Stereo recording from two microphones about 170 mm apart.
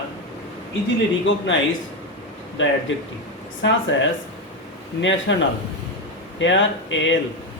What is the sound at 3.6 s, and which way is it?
Speech, 90° left.